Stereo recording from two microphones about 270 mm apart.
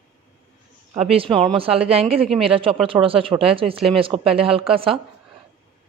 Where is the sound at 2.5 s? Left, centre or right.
Centre.